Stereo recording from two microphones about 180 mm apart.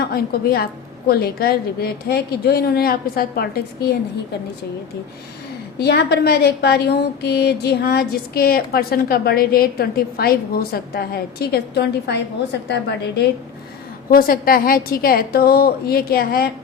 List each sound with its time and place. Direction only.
0.0 s a woman's voice: 60° left (ahead or behind)
5.8 s a woman's voice: 65° left (ahead or behind)
14.1 s a woman's voice: 55° left (ahead or behind)